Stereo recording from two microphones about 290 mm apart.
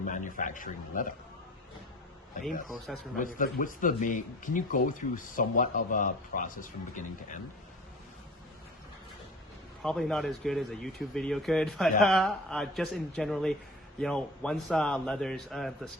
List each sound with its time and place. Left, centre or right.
0.0 s speech: left
2.4 s speech: centre
3.2 s speech: left
9.8 s speech: centre